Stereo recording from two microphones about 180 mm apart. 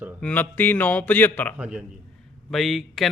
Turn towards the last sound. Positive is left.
turn(degrees=0)  # may be behind; listen again after turning